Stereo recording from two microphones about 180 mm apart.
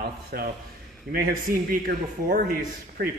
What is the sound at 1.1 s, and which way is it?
Speech, 55° right (ahead or behind).